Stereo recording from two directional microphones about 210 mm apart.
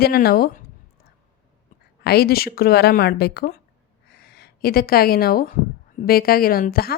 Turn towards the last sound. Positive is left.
turn(degrees=45)  # may be behind; listen again after turning